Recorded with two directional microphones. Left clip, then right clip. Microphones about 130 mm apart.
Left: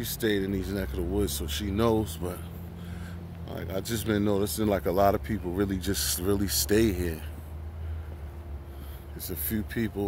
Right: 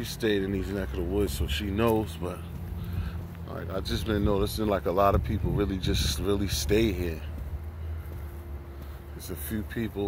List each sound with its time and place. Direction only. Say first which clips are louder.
0.0 s speech: right 1 dB; 25° left (ahead or behind)
3.4 s speech: even; 40° left (ahead or behind)
4.4 s speech: even; 35° left (ahead or behind)
9.3 s speech: left 2 dB; 50° left (ahead or behind)